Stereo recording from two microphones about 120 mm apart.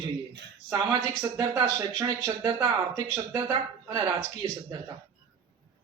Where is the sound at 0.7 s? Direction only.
25° right (ahead or behind).